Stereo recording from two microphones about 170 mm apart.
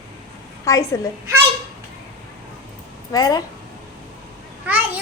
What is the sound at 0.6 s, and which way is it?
Speech, 20° left (ahead or behind).